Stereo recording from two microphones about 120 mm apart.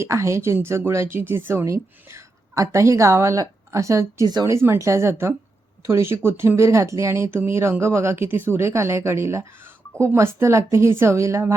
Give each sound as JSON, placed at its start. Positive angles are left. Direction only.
{"t": 0.0, "sound": "speech", "side_deg": -25}